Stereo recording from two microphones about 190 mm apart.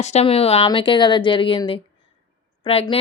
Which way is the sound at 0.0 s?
35° left (ahead or behind).